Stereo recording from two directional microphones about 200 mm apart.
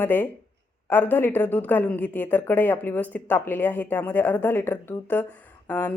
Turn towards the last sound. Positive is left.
turn(degrees=5)  # may be behind; listen again after turning